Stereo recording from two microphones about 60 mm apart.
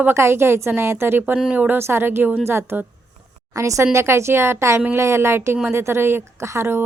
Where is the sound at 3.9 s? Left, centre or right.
Right.